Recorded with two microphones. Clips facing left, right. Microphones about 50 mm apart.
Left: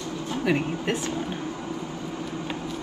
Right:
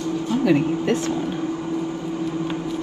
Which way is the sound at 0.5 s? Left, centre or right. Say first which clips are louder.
Right 5 dB; left.